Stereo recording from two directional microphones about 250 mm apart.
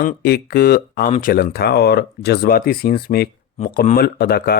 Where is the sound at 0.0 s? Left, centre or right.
Left.